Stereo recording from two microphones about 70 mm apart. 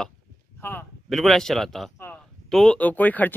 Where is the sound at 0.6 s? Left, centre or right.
Left.